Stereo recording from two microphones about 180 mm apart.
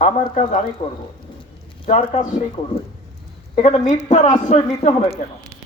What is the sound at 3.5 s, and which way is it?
A woman's voice, 40° left (ahead or behind).